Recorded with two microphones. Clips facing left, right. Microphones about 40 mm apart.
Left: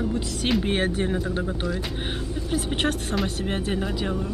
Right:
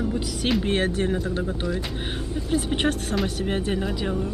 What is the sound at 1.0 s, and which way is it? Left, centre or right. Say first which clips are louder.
Speech: right 1 dB; centre.